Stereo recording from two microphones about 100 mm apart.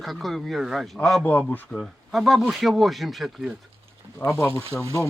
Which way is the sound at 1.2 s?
15° left (ahead or behind).